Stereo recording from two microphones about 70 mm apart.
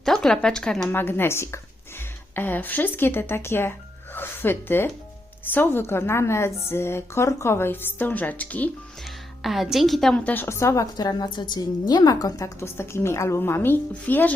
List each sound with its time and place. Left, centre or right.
0.0 s speech: centre
0.9 s a woman's voice: left
9.4 s a woman's voice: centre
10.2 s a woman's voice: centre
10.4 s a woman's voice: left
10.9 s a woman's voice: left
12.5 s a woman's voice: left